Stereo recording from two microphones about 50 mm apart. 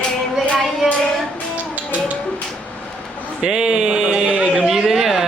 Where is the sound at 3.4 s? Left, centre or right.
Centre.